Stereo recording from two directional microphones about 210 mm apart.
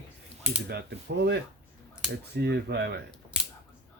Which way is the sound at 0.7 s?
50° right (ahead or behind).